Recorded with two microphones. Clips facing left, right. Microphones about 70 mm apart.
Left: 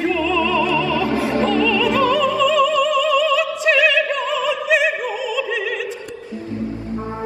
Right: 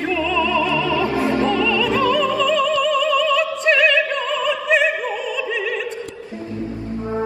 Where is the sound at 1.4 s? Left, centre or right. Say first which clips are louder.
Left 1 dB; right.